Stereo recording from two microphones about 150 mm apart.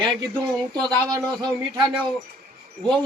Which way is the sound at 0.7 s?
25° right (ahead or behind).